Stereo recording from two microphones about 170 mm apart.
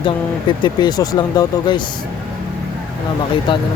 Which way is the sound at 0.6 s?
25° left (ahead or behind).